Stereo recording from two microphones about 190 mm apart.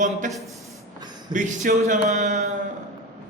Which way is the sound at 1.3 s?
45° right (ahead or behind).